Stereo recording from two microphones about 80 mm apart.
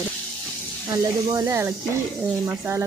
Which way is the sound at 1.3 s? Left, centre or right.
Right.